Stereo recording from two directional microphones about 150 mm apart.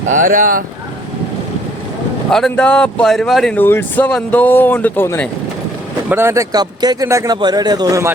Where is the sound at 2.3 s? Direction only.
5° left (ahead or behind).